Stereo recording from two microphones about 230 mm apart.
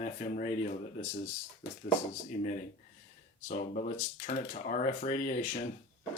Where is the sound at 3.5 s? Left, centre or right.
Left.